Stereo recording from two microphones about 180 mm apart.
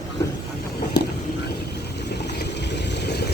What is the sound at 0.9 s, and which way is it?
Vehicle, 65° left (ahead or behind).